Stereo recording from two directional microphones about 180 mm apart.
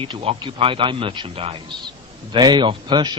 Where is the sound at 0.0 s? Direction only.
30° right (ahead or behind).